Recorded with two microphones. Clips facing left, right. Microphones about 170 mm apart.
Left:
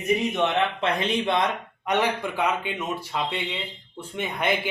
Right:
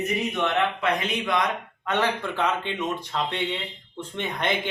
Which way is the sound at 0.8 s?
30° left (ahead or behind).